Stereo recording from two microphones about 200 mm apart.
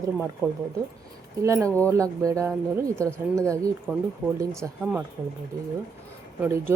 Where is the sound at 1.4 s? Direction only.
15° right (ahead or behind).